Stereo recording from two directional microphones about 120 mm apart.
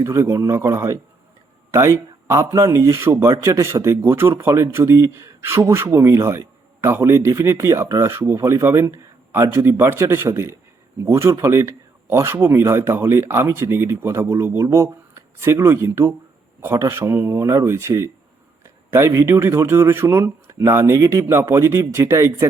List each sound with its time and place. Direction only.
0.0 s speech: 25° right (ahead or behind)